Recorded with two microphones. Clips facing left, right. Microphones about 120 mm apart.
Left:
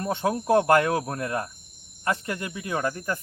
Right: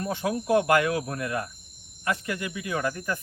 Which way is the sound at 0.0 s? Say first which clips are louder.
Left 2 dB; 30° left (ahead or behind).